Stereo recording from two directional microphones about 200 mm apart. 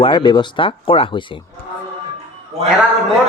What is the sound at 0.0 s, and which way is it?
Speech, 25° left (ahead or behind).